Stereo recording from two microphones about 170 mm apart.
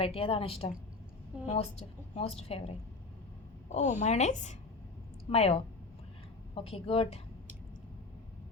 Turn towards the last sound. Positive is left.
turn(degrees=35)  # may be behind; listen again after turning